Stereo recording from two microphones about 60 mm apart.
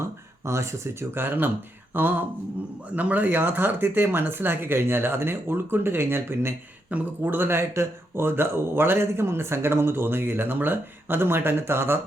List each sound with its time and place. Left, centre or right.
0.0 s speech: right